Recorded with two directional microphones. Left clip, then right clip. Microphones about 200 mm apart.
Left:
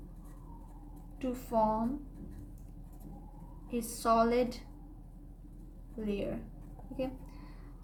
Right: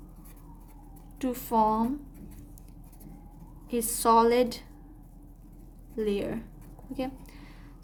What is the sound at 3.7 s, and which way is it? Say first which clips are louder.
Speech: right 7 dB; 55° right (ahead or behind).